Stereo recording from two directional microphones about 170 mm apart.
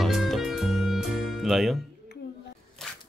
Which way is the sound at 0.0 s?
Centre (ahead or behind).